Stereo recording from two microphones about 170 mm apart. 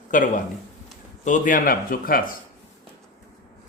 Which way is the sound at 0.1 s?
50° left (ahead or behind).